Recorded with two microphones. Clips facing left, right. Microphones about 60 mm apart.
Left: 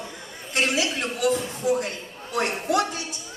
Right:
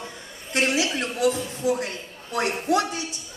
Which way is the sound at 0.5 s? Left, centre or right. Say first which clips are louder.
Right 1 dB; right.